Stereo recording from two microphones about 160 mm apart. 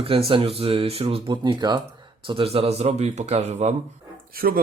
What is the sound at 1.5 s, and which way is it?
Speech, 25° right (ahead or behind).